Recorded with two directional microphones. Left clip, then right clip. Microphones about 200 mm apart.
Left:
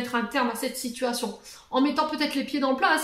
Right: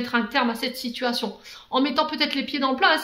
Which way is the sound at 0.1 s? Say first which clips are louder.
Right 4 dB; 35° right (ahead or behind).